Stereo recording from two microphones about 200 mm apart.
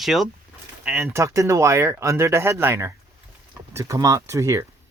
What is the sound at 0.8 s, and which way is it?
Speech, 10° right (ahead or behind).